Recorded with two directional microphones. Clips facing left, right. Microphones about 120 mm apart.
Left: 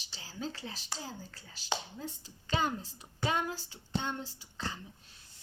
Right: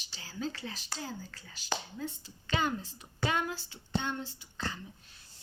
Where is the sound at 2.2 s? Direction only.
35° left (ahead or behind).